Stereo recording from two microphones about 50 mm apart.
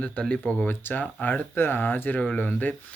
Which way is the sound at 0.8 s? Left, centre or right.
Left.